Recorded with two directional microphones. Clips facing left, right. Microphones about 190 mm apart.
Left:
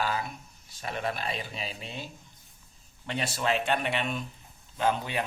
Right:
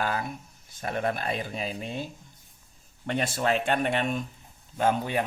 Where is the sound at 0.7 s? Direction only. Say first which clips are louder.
Right 4 dB; 50° right (ahead or behind).